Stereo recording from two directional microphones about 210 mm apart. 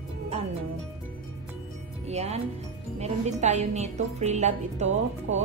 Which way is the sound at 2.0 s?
30° right (ahead or behind).